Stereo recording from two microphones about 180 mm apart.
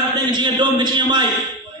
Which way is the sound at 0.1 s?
25° right (ahead or behind).